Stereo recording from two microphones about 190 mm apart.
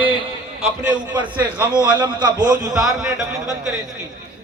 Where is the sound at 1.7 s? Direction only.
20° right (ahead or behind).